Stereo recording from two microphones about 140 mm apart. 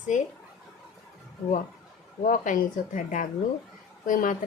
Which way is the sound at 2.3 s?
70° left (ahead or behind).